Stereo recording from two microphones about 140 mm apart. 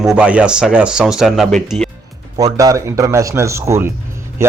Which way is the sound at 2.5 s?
25° right (ahead or behind).